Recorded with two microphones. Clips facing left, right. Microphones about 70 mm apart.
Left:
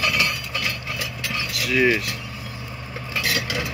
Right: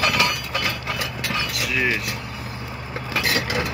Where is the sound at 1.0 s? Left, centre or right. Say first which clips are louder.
Right 2 dB; right.